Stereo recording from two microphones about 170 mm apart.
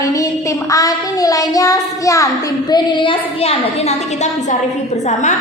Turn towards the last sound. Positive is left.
turn(degrees=40)  # may be behind; listen again after turning